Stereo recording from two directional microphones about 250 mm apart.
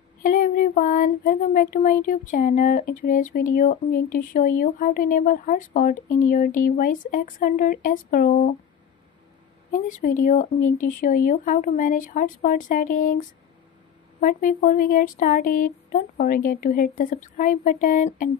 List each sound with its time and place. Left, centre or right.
0.2 s speech: left
9.7 s speech: left
14.2 s speech: left